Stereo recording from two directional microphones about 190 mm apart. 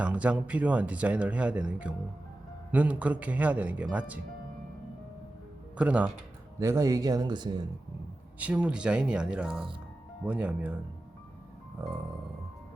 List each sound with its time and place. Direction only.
0.0 s speech: 5° right (ahead or behind)
5.7 s speech: 5° right (ahead or behind); by 7.7 s 25° right (ahead or behind)
8.4 s speech: 5° right (ahead or behind)